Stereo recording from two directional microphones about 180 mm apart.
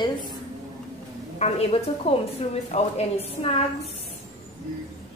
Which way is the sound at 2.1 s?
35° left (ahead or behind).